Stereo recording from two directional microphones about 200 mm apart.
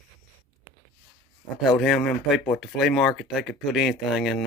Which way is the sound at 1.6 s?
Centre (ahead or behind).